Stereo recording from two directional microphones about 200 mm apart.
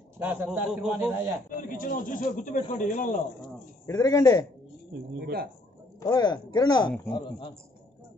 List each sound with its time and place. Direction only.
0.2 s a man's voice: 10° right (ahead or behind)
1.6 s speech: 40° left (ahead or behind)
3.8 s speech: 15° left (ahead or behind)
5.1 s speech: 50° right (ahead or behind)
5.9 s speech: 20° left (ahead or behind)